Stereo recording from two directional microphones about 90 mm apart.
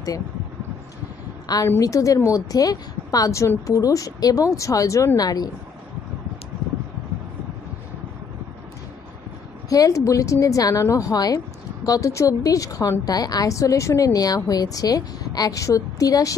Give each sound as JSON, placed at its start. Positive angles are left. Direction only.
{"t": 1.8, "sound": "a woman's voice", "side_deg": 40}
{"t": 9.7, "sound": "a woman's voice", "side_deg": 40}